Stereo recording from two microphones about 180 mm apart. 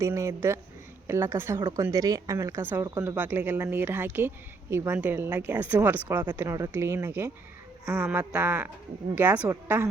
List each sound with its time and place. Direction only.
0.0 s speech: 15° right (ahead or behind)